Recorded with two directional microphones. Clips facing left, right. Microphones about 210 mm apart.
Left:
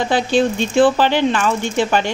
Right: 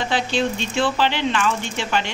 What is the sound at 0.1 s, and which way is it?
Speech, 45° left (ahead or behind).